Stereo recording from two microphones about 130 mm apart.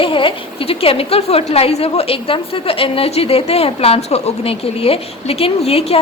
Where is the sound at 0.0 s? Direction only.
40° left (ahead or behind).